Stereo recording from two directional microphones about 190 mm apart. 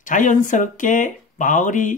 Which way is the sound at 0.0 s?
40° left (ahead or behind).